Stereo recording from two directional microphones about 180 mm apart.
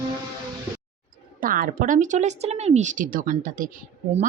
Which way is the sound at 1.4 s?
50° right (ahead or behind).